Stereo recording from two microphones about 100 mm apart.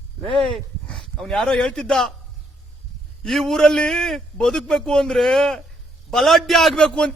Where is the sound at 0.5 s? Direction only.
5° left (ahead or behind).